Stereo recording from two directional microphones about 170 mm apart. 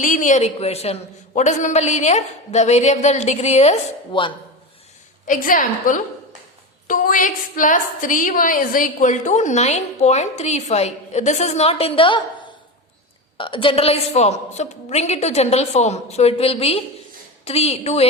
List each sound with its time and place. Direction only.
0.0 s a man's voice: 45° left (ahead or behind)
5.2 s a woman's voice: 50° left (ahead or behind); by 12.2 s 30° left (ahead or behind)
13.3 s a man's voice: 30° left (ahead or behind)